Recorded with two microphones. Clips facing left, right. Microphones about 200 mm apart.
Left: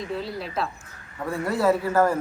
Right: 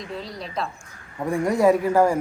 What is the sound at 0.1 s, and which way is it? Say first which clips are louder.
Speech: left 2 dB; 5° left (ahead or behind).